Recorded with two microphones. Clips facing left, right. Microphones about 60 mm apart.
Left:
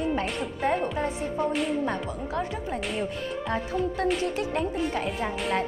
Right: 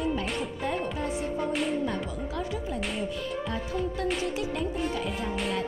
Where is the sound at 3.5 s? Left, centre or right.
Left.